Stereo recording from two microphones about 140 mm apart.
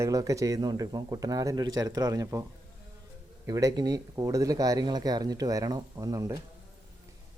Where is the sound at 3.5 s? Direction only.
25° right (ahead or behind).